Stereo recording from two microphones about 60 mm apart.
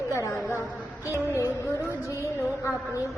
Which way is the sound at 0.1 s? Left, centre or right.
Left.